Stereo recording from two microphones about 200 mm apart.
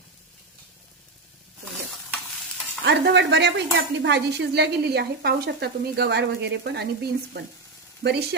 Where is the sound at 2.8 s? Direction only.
60° right (ahead or behind).